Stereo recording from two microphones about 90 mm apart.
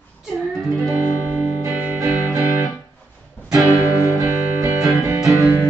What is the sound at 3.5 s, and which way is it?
Music, 35° right (ahead or behind).